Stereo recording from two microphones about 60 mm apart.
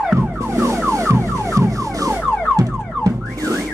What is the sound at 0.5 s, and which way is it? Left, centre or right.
Car alarm, right.